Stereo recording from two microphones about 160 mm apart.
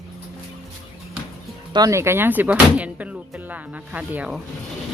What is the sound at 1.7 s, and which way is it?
Speech, 25° right (ahead or behind).